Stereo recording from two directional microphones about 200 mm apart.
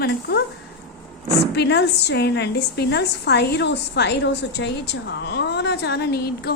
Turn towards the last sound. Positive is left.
turn(degrees=50)  # may be behind; listen again after turning